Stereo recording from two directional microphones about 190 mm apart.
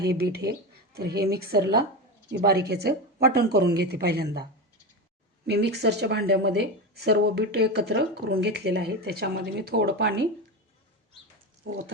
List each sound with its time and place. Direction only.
0.0 s speech: 55° right (ahead or behind)
5.5 s speech: 60° right (ahead or behind); by 10.2 s 80° right